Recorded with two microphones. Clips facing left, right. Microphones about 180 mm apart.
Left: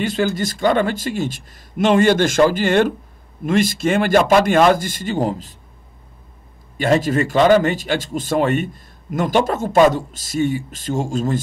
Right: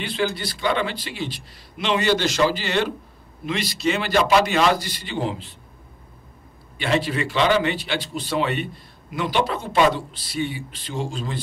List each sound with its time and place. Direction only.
0.0 s speech: 45° left (ahead or behind)
6.8 s speech: 45° left (ahead or behind)